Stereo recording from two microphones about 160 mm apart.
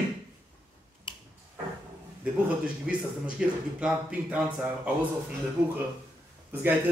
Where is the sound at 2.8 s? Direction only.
5° right (ahead or behind).